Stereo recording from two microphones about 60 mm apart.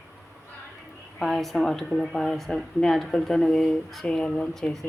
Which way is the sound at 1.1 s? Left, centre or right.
Centre.